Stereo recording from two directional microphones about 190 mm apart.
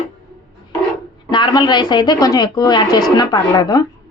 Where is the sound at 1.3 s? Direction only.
25° left (ahead or behind).